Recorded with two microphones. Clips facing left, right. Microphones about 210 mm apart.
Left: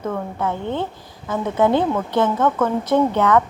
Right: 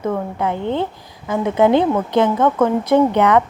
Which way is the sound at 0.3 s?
15° right (ahead or behind).